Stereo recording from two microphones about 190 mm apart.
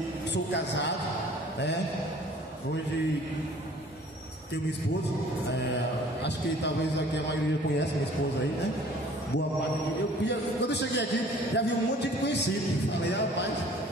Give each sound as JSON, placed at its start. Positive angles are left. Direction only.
{"t": 0.3, "sound": "speech", "side_deg": 65}
{"t": 10.2, "sound": "speech", "side_deg": 65}